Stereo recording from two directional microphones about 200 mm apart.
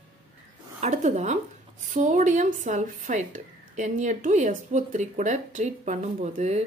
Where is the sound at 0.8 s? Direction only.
35° right (ahead or behind).